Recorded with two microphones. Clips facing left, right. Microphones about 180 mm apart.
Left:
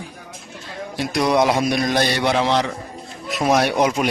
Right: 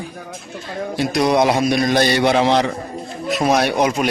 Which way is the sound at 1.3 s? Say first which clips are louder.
Right 1 dB; 20° right (ahead or behind).